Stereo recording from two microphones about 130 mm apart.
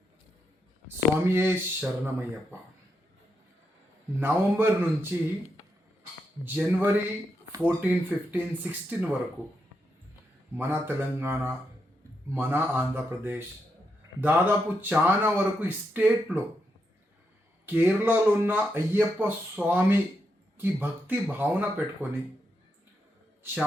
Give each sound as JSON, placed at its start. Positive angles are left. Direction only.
{"t": 0.9, "sound": "speech", "side_deg": -15}
{"t": 4.2, "sound": "speech", "side_deg": -15}
{"t": 6.4, "sound": "speech", "side_deg": -10}
{"t": 10.6, "sound": "speech", "side_deg": -15}
{"t": 17.7, "sound": "speech", "side_deg": -15}